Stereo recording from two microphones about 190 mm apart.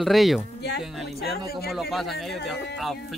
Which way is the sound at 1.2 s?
55° left (ahead or behind).